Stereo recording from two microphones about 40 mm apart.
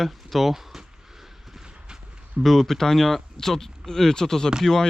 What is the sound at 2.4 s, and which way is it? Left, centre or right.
Speech, centre.